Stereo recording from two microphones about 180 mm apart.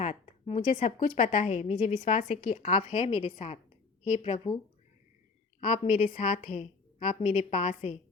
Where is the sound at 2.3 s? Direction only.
45° left (ahead or behind).